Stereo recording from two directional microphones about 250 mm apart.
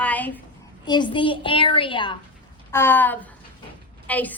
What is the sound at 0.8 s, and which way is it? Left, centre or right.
A woman's voice, centre.